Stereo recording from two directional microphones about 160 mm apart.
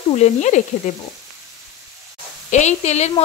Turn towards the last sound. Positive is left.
turn(degrees=45)  # may be behind; listen again after turning